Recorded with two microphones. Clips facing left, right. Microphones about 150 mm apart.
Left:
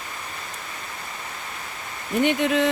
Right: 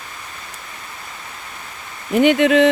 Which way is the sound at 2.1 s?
90° right.